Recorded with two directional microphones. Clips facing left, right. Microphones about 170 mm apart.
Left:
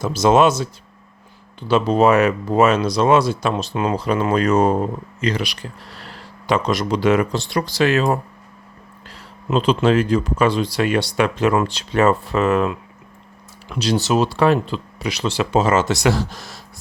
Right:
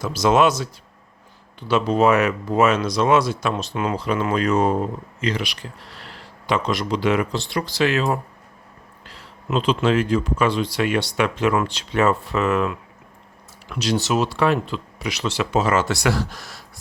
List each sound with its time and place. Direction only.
0.0 s speech: 25° left (ahead or behind); by 8.2 s 45° left (ahead or behind)
9.5 s speech: 40° left (ahead or behind); by 16.6 s 25° left (ahead or behind)